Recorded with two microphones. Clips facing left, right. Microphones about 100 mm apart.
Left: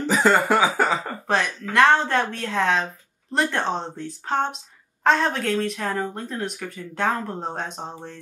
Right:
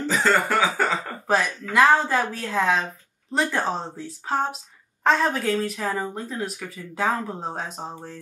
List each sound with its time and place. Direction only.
0.0 s cough: 15° left (ahead or behind)
1.2 s speech: 5° right (ahead or behind)